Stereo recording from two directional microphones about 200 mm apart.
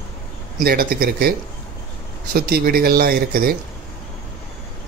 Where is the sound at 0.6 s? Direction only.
45° right (ahead or behind).